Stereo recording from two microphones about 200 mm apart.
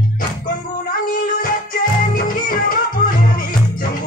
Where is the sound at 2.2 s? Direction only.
45° left (ahead or behind).